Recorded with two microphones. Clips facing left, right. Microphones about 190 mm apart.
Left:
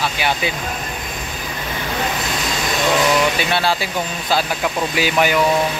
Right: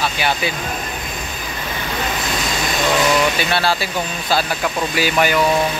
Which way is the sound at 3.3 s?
15° left (ahead or behind).